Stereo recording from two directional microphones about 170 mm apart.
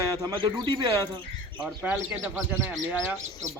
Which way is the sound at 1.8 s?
10° right (ahead or behind).